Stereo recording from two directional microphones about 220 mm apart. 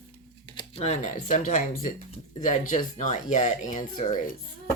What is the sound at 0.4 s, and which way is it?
Speech, 25° left (ahead or behind).